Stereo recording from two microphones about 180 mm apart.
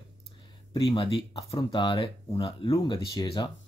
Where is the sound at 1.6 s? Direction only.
25° left (ahead or behind).